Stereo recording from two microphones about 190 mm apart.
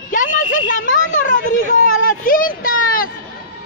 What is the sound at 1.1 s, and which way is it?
A woman's voice, 40° left (ahead or behind).